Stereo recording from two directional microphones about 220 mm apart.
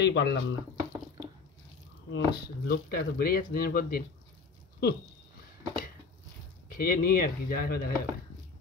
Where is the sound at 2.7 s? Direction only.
45° left (ahead or behind).